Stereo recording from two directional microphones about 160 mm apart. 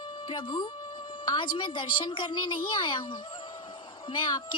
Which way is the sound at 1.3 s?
30° left (ahead or behind).